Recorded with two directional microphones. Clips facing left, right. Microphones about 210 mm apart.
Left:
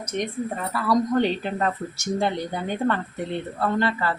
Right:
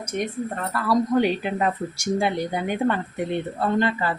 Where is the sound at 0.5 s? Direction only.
5° left (ahead or behind).